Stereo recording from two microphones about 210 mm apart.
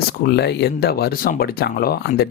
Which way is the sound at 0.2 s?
50° left (ahead or behind).